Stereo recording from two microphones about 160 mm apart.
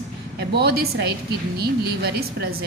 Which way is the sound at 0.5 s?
85° right.